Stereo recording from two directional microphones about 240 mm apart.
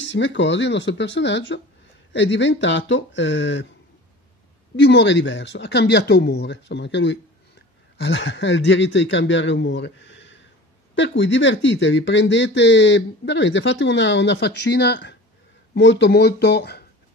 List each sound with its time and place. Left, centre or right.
0.1 s speech: left
4.7 s speech: left